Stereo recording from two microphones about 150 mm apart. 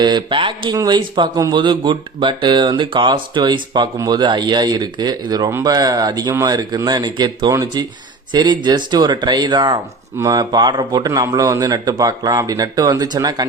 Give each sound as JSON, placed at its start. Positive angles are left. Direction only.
{"t": 0.0, "sound": "speech", "side_deg": -30}